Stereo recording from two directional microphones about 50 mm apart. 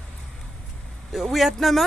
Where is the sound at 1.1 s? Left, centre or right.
Centre.